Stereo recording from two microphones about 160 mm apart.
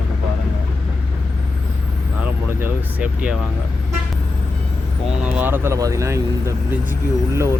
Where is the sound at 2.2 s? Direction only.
10° right (ahead or behind).